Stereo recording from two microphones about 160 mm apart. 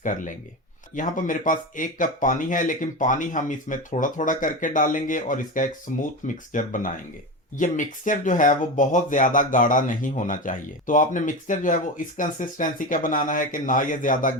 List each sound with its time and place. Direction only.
0.0 s speech: 55° left (ahead or behind)